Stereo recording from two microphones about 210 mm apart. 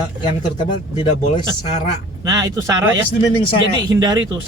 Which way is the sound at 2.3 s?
15° right (ahead or behind).